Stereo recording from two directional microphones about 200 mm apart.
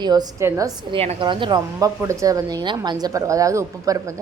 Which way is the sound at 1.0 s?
25° right (ahead or behind).